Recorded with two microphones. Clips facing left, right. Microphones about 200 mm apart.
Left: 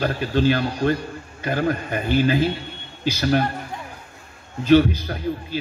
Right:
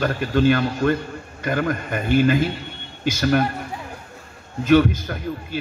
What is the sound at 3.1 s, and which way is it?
Speech, 50° right (ahead or behind).